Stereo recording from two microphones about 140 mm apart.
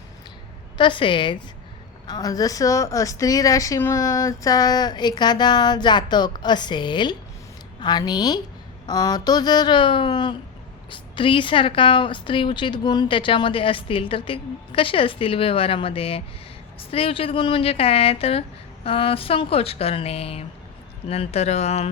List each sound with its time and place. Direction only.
0.8 s a woman's voice: 35° left (ahead or behind)